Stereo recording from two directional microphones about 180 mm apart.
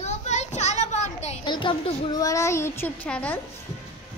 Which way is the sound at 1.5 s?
25° left (ahead or behind).